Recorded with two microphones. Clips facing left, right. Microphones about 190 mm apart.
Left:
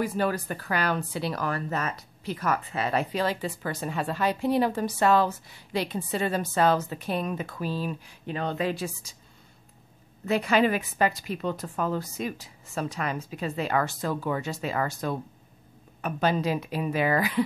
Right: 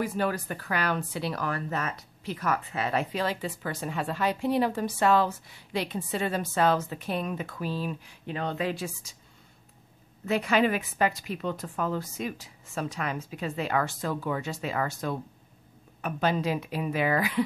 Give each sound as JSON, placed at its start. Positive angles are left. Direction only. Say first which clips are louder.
{"t": 0.0, "sound": "a woman's voice", "louder": "left 2 dB", "side_deg": 35}
{"t": 10.2, "sound": "a woman's voice", "louder": "left 2 dB", "side_deg": 35}